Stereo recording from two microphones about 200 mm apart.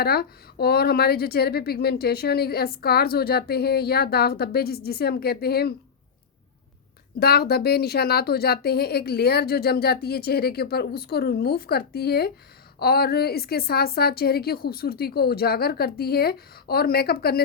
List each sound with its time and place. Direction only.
0.0 s speech: 50° left (ahead or behind)
7.2 s speech: 50° left (ahead or behind)